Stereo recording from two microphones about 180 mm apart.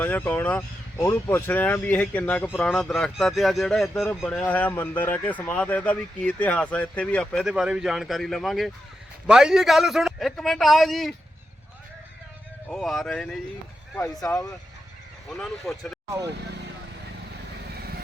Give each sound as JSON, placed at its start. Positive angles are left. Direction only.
{"t": 0.0, "sound": "speech", "side_deg": 10}
{"t": 12.6, "sound": "speech", "side_deg": 5}
{"t": 13.9, "sound": "speech", "side_deg": 15}
{"t": 15.3, "sound": "speech", "side_deg": 0}